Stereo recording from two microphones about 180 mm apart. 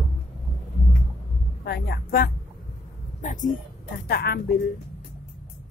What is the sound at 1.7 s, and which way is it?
Speech, 60° left (ahead or behind).